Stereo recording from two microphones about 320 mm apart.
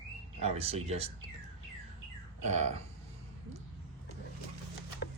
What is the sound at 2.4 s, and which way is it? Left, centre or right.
Speech, right.